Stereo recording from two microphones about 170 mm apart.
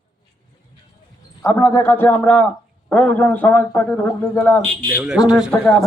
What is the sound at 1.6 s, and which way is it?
A man's voice, 15° left (ahead or behind).